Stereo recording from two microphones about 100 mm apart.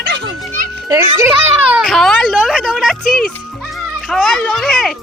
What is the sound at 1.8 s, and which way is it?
Speech, 5° left (ahead or behind).